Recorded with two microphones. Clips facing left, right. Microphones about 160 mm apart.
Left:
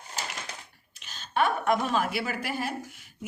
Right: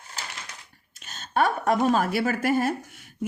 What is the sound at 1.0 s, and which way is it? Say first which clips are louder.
A woman's voice: right 3 dB; 45° right (ahead or behind).